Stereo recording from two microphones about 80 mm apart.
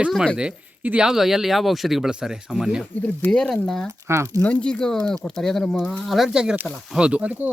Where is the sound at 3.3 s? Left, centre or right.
Centre.